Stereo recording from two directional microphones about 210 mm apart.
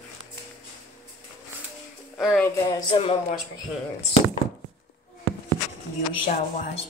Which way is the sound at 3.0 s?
30° left (ahead or behind).